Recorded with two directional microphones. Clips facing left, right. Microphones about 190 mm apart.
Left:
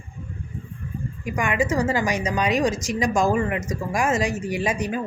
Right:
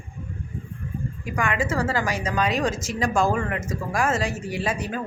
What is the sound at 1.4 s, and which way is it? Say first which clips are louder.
A woman's voice: left 2 dB; 15° left (ahead or behind).